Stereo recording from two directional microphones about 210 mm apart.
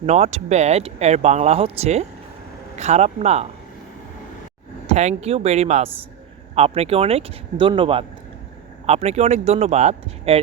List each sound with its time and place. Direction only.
0.0 s speech: 30° right (ahead or behind)
4.9 s speech: 30° right (ahead or behind)